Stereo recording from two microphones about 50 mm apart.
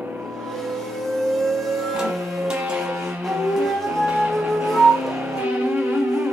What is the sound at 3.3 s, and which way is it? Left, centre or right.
Music, centre.